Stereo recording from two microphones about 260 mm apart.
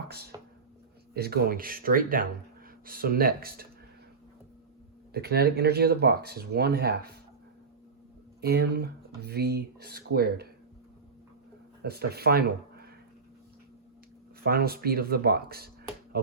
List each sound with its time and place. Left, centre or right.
1.1 s speech: right
5.1 s speech: right
8.4 s speech: right
11.8 s speech: right
14.4 s speech: right